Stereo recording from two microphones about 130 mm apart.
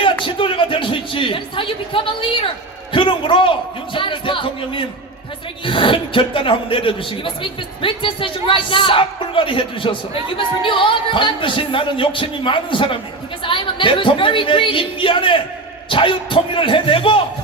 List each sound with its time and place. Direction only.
0.0 s a man's voice: 40° left (ahead or behind)